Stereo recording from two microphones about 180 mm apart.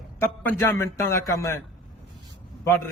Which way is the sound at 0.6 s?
15° left (ahead or behind).